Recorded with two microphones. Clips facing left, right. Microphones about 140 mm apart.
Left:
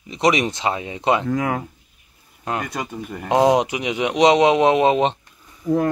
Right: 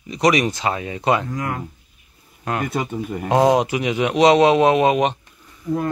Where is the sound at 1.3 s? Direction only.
90° left.